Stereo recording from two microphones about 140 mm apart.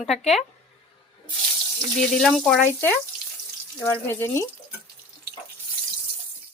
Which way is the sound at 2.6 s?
15° left (ahead or behind).